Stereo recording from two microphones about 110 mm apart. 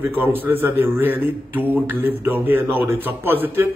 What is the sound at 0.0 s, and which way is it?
A man's voice, 20° right (ahead or behind).